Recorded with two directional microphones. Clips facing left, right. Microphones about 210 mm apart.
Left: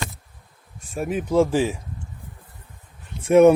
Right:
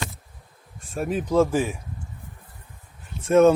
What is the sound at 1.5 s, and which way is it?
Speech, 25° left (ahead or behind).